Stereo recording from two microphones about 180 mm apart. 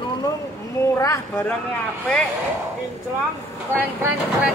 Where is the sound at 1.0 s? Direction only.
15° left (ahead or behind).